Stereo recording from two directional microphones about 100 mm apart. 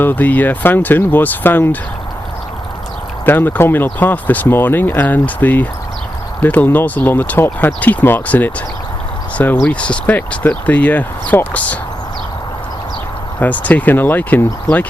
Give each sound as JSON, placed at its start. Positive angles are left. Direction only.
{"t": 0.0, "sound": "speech", "side_deg": 20}
{"t": 3.2, "sound": "speech", "side_deg": 20}
{"t": 9.6, "sound": "speech", "side_deg": 10}
{"t": 13.4, "sound": "speech", "side_deg": 15}